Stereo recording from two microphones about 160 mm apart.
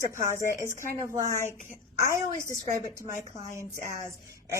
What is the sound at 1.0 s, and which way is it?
Speech, 20° right (ahead or behind).